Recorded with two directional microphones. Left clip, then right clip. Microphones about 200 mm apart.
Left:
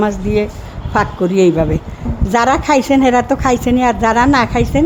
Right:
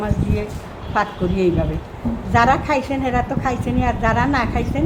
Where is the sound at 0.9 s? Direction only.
55° left (ahead or behind).